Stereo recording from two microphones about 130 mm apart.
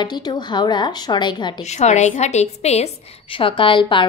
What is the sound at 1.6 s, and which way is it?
Speech, 60° left (ahead or behind).